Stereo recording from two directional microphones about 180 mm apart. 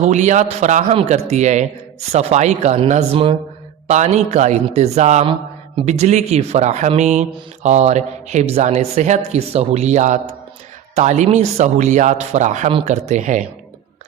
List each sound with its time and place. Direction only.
0.1 s speech: 40° right (ahead or behind)